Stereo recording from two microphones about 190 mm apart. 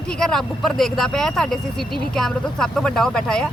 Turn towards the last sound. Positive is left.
turn(degrees=5)  # may be behind; listen again after turning